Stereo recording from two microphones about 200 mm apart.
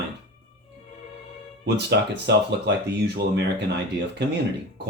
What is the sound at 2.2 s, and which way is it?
Speech, 55° right (ahead or behind).